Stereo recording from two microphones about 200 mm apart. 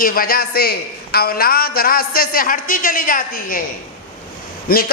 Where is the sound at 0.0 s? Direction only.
45° left (ahead or behind).